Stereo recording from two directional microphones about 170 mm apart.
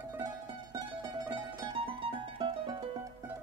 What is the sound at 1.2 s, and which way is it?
Music, 30° right (ahead or behind).